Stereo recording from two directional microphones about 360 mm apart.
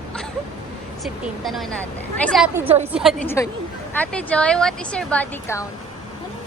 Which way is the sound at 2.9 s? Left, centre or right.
Centre.